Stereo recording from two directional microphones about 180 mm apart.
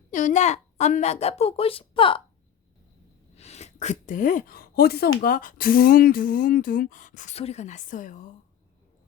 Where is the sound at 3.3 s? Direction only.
35° left (ahead or behind).